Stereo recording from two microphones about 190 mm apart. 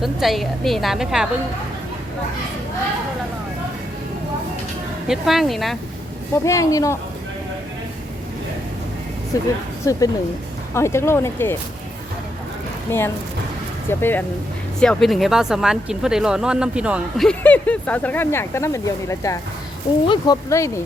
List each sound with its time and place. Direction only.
0.0 s speech: centre (ahead or behind)
5.0 s speech: centre (ahead or behind)
6.3 s speech: 15° left (ahead or behind)
9.3 s speech: 15° left (ahead or behind)
12.9 s speech: 10° left (ahead or behind); by 17.2 s 5° right (ahead or behind)
17.2 s speech: 10° left (ahead or behind)